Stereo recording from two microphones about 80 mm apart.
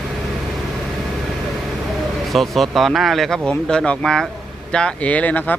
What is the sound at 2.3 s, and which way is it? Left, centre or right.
Speech, centre.